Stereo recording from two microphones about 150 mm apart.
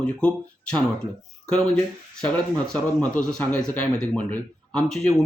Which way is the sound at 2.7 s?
5° left (ahead or behind).